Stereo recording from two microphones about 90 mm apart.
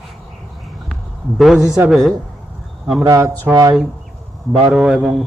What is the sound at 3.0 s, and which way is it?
Speech, 40° right (ahead or behind).